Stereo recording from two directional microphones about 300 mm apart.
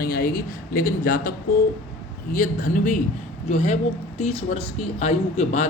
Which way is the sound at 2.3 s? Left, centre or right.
Left.